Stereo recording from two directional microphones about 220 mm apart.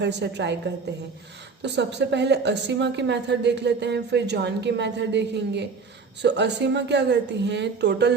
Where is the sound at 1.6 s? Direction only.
50° right (ahead or behind).